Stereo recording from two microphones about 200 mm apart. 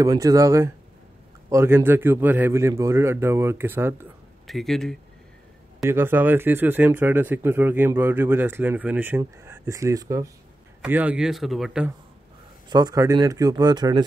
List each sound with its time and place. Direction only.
0.0 s speech: 15° right (ahead or behind)
4.5 s a man's voice: centre (ahead or behind)
5.9 s a man's voice: 10° right (ahead or behind)
12.6 s speech: 20° right (ahead or behind)